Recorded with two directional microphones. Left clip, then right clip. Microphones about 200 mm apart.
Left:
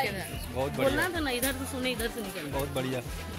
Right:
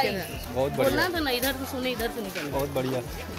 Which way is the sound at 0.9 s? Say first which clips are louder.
Right 4 dB; 30° left (ahead or behind).